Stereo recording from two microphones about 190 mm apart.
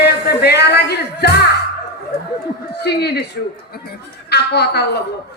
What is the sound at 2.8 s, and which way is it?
Speech, 60° left (ahead or behind).